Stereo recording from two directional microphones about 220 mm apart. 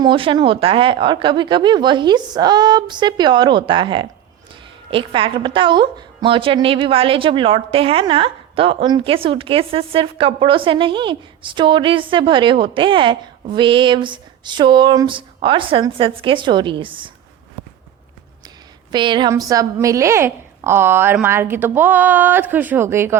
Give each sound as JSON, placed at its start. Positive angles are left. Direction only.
{"t": 0.0, "sound": "a woman's voice", "side_deg": -20}
{"t": 18.4, "sound": "a woman's voice", "side_deg": -20}